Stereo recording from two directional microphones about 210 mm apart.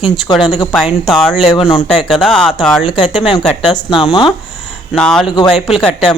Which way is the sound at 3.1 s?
Centre (ahead or behind).